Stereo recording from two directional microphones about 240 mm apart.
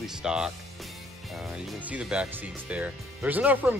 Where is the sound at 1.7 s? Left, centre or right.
Centre.